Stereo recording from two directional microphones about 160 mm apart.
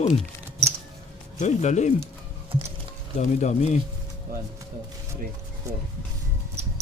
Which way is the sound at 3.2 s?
45° left (ahead or behind).